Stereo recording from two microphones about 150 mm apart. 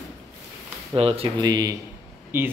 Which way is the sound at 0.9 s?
40° right (ahead or behind).